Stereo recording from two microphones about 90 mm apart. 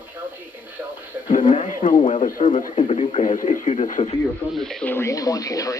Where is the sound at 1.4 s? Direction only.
75° left (ahead or behind).